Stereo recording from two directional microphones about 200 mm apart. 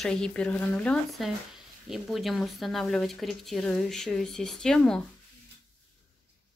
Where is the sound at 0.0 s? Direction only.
5° left (ahead or behind).